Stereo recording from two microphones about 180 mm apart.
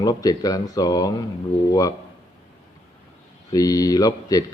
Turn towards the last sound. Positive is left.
turn(degrees=20)  # may be behind; listen again after turning